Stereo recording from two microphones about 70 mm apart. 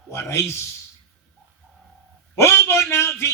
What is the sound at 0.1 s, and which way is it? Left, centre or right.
Speech, left.